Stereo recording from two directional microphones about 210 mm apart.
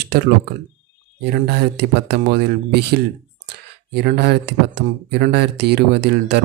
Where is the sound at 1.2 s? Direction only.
50° right (ahead or behind).